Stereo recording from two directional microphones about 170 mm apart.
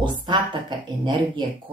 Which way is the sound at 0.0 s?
25° right (ahead or behind).